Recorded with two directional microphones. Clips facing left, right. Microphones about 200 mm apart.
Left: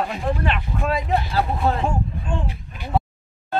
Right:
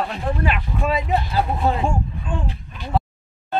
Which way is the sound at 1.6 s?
15° right (ahead or behind).